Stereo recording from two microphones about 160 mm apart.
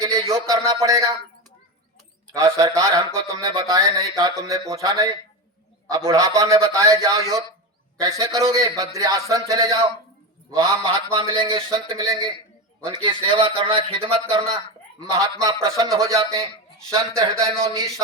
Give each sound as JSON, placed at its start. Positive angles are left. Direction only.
{"t": 0.3, "sound": "speech", "side_deg": -20}
{"t": 2.3, "sound": "a man's voice", "side_deg": -25}